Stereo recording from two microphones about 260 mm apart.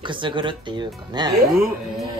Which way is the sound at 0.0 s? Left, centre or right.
Centre.